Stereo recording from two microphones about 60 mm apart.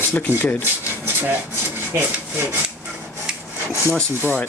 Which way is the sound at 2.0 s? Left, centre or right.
Right.